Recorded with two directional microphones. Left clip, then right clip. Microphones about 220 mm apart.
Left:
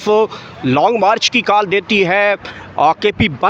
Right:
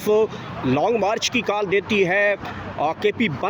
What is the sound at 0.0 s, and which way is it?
Speech, 20° left (ahead or behind).